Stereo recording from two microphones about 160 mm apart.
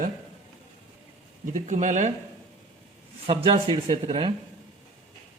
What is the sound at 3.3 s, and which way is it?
A man's voice, 35° right (ahead or behind).